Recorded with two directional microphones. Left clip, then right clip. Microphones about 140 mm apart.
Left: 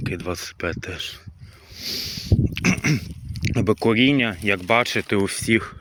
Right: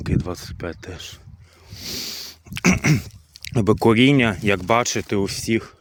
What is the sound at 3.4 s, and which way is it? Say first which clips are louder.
Speech: right 3 dB; 55° right (ahead or behind).